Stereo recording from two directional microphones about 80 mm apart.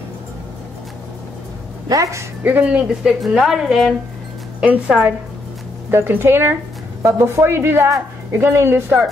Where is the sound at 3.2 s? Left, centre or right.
Centre.